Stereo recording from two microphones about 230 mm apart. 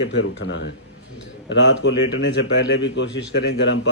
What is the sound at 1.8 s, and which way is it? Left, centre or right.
Speech, left.